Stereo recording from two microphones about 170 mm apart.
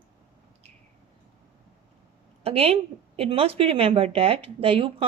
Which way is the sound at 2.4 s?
35° right (ahead or behind).